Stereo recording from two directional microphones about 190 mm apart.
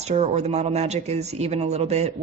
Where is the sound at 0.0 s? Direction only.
35° right (ahead or behind).